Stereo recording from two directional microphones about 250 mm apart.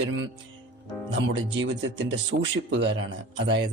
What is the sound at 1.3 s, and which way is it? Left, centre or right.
Speech, right.